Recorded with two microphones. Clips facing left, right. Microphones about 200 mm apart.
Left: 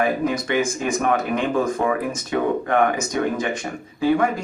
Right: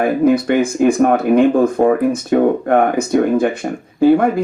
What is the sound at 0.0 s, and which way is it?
Speech, 55° right (ahead or behind).